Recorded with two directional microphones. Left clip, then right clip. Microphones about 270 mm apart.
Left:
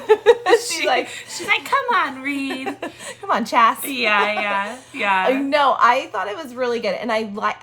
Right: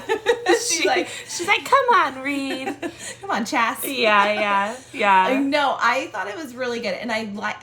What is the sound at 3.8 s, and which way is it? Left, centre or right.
A woman's voice, centre.